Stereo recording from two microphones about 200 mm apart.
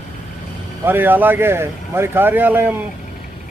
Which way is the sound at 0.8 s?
10° right (ahead or behind).